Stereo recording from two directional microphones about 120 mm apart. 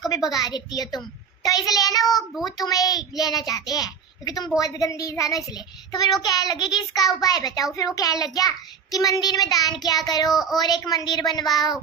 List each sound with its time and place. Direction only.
0.3 s child singing: 35° left (ahead or behind)
4.6 s speech: 30° left (ahead or behind)
5.9 s child singing: 35° left (ahead or behind)
10.3 s a woman's voice: centre (ahead or behind)
10.6 s child singing: 35° left (ahead or behind)